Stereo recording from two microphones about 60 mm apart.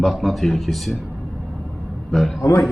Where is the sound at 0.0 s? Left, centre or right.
Centre.